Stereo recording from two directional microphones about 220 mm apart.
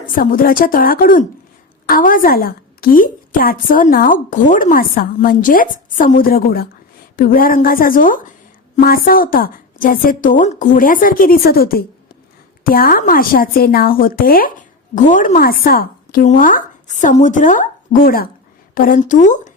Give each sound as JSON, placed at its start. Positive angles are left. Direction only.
{"t": 0.0, "sound": "a woman's voice", "side_deg": 40}